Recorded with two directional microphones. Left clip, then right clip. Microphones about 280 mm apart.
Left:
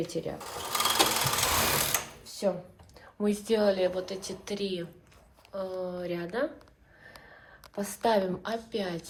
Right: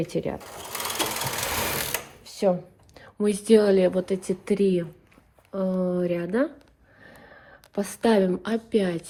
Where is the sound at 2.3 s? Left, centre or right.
Right.